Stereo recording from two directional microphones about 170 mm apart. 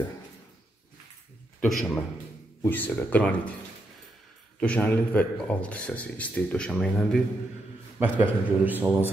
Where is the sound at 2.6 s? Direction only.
10° left (ahead or behind).